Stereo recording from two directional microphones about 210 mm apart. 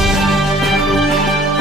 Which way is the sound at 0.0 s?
Centre (ahead or behind).